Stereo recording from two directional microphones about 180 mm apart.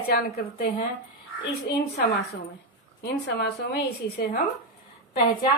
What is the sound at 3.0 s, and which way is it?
A woman's voice, 65° left (ahead or behind).